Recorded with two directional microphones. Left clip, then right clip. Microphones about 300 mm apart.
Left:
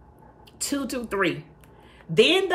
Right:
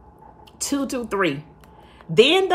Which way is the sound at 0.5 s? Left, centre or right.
Centre.